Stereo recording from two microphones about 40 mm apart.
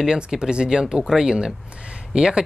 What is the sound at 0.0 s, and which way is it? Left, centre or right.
Speech, centre.